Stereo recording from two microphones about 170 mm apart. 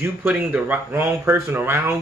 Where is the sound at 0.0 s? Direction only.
10° right (ahead or behind).